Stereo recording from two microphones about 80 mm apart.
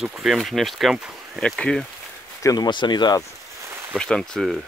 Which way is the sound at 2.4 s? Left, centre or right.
Left.